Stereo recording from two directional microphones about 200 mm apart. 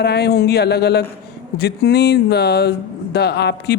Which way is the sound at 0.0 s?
55° left (ahead or behind).